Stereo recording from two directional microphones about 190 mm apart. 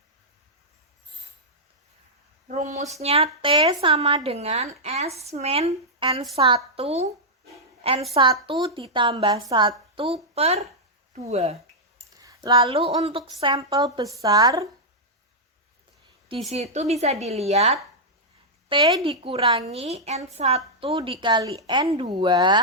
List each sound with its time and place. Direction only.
2.5 s a woman's voice: 35° right (ahead or behind)
8.1 s a woman's voice: 25° right (ahead or behind)
11.9 s a woman's voice: 15° right (ahead or behind)
16.3 s a woman's voice: 30° right (ahead or behind)